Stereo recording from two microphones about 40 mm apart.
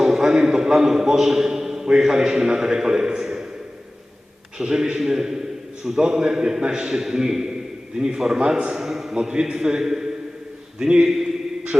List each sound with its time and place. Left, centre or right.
0.0 s a sound: centre
2.0 s a man's voice: centre
4.5 s a man's voice: centre
8.4 s a man's voice: right
8.7 s a man's voice: centre
9.1 s a man's voice: centre